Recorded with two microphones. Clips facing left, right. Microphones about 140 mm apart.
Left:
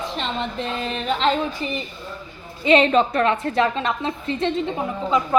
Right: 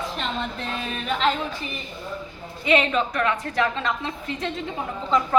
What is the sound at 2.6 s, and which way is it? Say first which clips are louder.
A woman's voice: left 5 dB; 30° left (ahead or behind).